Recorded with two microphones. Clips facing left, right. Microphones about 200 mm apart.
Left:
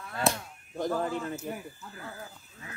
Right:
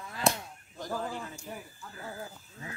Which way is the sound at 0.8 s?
60° left (ahead or behind).